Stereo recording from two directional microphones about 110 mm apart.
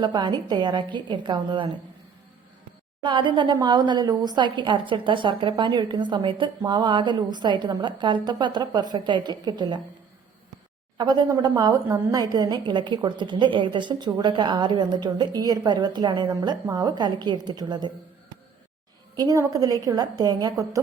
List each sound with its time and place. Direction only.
0.0 s a woman's voice: 45° right (ahead or behind)
3.0 s a woman's voice: 45° right (ahead or behind)
10.9 s a woman's voice: 40° right (ahead or behind)
19.1 s a woman's voice: 35° right (ahead or behind)